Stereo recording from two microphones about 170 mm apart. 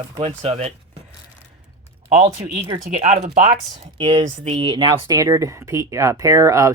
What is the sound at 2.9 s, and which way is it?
Speech, 45° right (ahead or behind).